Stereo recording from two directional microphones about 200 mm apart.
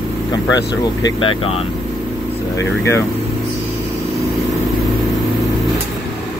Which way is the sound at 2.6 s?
15° left (ahead or behind).